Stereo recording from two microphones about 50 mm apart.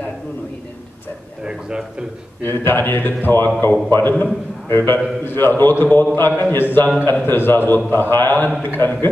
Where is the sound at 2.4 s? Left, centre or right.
Left.